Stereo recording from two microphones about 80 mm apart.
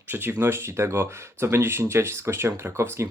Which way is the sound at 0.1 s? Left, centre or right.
Right.